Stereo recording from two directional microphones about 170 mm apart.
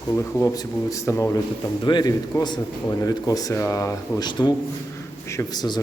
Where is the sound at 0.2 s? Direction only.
15° left (ahead or behind).